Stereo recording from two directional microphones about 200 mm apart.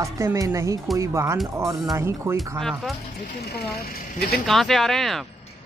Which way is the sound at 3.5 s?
50° left (ahead or behind).